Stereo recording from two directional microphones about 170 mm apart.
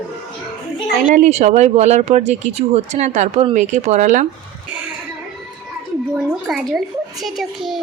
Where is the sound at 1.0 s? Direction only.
45° right (ahead or behind).